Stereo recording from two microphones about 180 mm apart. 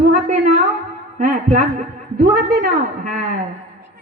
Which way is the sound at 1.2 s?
50° right (ahead or behind).